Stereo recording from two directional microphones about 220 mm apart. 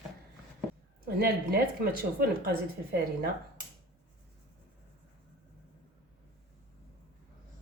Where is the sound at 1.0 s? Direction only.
45° right (ahead or behind).